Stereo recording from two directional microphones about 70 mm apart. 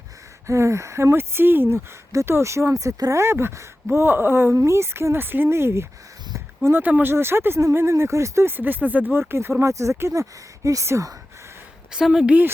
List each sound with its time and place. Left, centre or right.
0.4 s speech: right
3.2 s speech: right
8.5 s speech: right
9.3 s speech: right
11.9 s a woman's voice: centre